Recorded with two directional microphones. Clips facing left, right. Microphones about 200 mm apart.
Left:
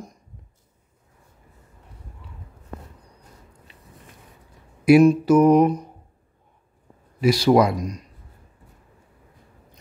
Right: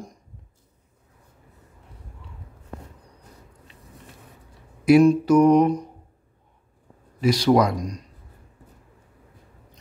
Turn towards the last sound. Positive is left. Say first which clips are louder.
# left 2 dB
turn(degrees=5)  # may be behind; listen again after turning